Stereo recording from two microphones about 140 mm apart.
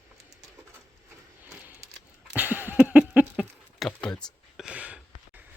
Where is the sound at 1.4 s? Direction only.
10° right (ahead or behind).